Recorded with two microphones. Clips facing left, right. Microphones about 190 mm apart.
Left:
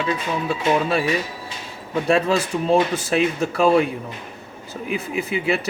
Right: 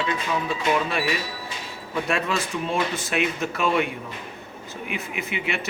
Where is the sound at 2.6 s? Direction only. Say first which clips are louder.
Left 7 dB; 35° left (ahead or behind).